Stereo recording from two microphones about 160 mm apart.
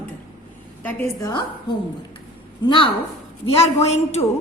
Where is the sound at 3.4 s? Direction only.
40° left (ahead or behind).